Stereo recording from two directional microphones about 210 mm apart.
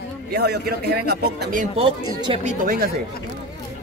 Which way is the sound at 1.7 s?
25° right (ahead or behind).